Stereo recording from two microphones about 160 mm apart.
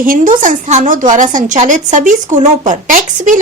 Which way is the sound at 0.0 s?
55° right (ahead or behind).